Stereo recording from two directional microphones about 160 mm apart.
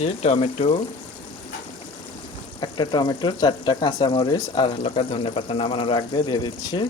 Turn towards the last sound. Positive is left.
turn(degrees=30)  # may be behind; listen again after turning